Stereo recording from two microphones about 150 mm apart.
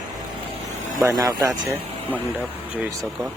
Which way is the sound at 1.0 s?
25° right (ahead or behind).